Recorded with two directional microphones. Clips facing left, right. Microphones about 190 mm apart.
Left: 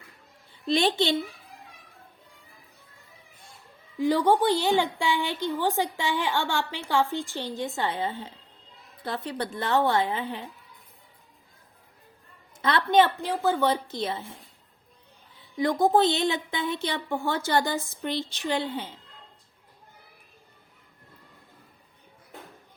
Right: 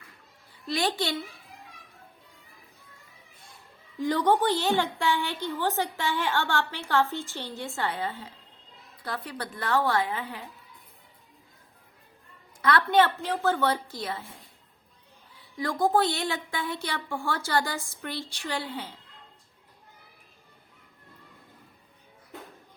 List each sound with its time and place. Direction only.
0.7 s a woman's voice: 25° left (ahead or behind)
3.9 s a woman's voice: 10° left (ahead or behind)
12.6 s a woman's voice: 20° left (ahead or behind)
15.5 s a woman's voice: 20° left (ahead or behind)